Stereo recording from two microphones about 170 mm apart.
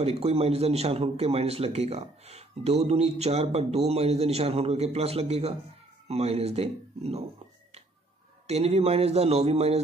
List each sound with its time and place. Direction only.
0.0 s speech: 35° right (ahead or behind)
8.5 s speech: 40° right (ahead or behind)